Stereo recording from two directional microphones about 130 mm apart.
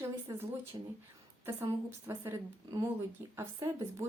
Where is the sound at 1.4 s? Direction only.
20° right (ahead or behind).